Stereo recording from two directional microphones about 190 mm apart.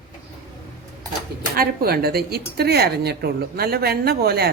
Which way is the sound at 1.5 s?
55° right (ahead or behind).